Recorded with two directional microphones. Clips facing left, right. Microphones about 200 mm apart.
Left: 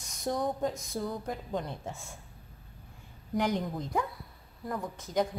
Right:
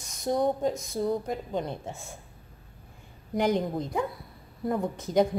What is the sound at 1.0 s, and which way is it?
Speech, 25° right (ahead or behind).